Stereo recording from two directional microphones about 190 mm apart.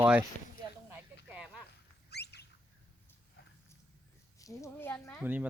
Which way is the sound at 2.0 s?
60° left (ahead or behind).